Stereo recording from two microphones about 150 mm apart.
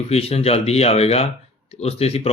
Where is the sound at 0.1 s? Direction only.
45° left (ahead or behind).